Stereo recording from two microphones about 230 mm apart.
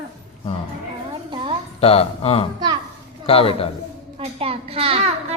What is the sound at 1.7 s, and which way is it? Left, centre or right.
Music, left.